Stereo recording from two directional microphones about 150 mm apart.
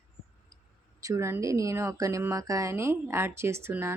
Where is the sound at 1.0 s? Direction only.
20° right (ahead or behind).